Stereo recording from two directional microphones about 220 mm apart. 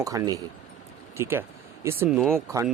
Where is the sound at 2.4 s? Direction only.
15° right (ahead or behind).